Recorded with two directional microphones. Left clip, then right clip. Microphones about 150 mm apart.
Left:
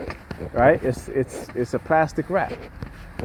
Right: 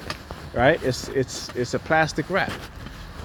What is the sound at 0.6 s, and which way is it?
Speech, 40° left (ahead or behind).